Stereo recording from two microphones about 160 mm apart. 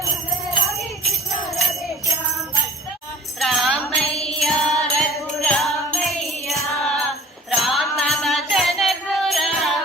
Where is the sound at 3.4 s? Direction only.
Centre (ahead or behind).